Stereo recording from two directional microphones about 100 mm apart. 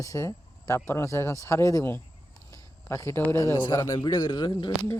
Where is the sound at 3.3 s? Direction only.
30° left (ahead or behind).